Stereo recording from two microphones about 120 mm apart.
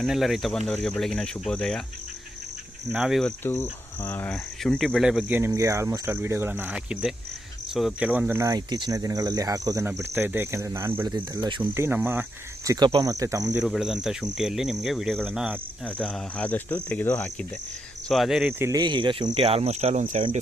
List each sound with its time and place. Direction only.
0.0 s speech: centre (ahead or behind)
2.9 s speech: 5° right (ahead or behind)
3.5 s speech: 20° left (ahead or behind)
4.3 s speech: 5° left (ahead or behind)
5.5 s speech: 25° right (ahead or behind)
11.0 s speech: 35° right (ahead or behind)
11.7 s speech: 20° right (ahead or behind)
12.6 s speech: 30° right (ahead or behind)
13.6 s speech: 5° right (ahead or behind)
16.0 s speech: centre (ahead or behind)
16.5 s speech: 15° left (ahead or behind)
18.1 s speech: centre (ahead or behind)
18.8 s speech: 40° right (ahead or behind)
19.5 s speech: 60° right (ahead or behind)